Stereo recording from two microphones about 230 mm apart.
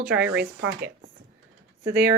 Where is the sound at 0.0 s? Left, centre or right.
Centre.